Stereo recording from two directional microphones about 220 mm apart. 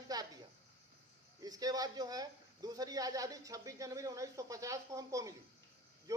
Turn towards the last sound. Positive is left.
turn(degrees=-15)  # may be behind; listen again after turning